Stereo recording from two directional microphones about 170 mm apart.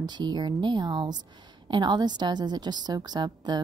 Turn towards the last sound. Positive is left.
turn(degrees=-25)  # may be behind; listen again after turning